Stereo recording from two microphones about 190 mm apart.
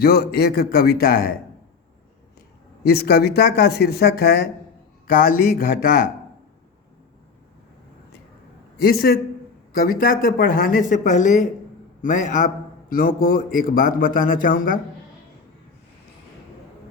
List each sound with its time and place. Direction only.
0.0 s speech: 55° left (ahead or behind)
2.8 s speech: 55° left (ahead or behind)
8.8 s a man's voice: 50° left (ahead or behind)